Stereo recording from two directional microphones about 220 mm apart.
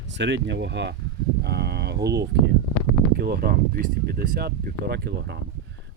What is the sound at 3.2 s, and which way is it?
Speech, 45° right (ahead or behind).